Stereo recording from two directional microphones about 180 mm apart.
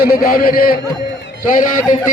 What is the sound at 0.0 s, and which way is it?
Speech, 55° left (ahead or behind).